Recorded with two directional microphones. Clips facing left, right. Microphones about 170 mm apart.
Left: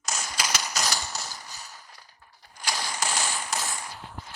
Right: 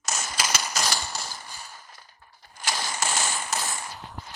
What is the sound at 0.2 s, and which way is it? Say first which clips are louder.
Typewriter: right 2 dB; 25° right (ahead or behind).